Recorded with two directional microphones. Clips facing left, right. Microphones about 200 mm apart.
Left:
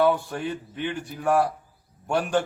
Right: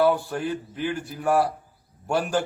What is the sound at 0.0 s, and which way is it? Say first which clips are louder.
A man's voice: right 1 dB; centre (ahead or behind).